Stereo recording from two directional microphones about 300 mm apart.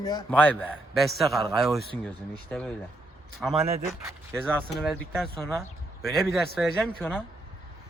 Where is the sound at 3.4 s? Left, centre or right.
Centre.